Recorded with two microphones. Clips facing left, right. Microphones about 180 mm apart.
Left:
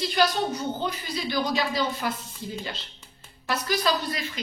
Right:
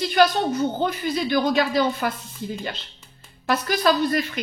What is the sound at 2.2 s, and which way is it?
Speech, centre (ahead or behind).